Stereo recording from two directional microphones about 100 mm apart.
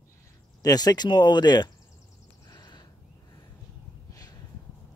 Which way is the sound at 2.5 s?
45° left (ahead or behind).